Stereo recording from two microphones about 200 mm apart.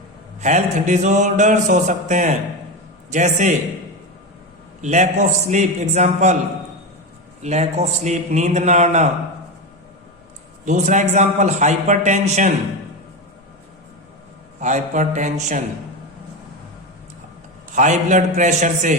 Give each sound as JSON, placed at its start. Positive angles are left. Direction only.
{"t": 0.3, "sound": "mantra", "side_deg": -35}
{"t": 4.8, "sound": "mantra", "side_deg": -35}
{"t": 7.4, "sound": "mantra", "side_deg": -35}
{"t": 10.7, "sound": "mantra", "side_deg": -35}
{"t": 14.6, "sound": "mantra", "side_deg": -35}
{"t": 17.7, "sound": "mantra", "side_deg": -40}